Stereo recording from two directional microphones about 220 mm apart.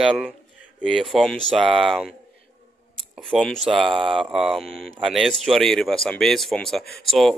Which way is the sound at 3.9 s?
25° right (ahead or behind).